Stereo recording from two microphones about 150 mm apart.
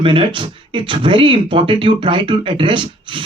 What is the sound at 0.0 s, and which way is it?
Speech, 35° right (ahead or behind).